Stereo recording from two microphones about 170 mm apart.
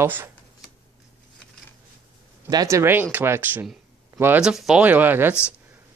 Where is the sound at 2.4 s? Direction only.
20° right (ahead or behind).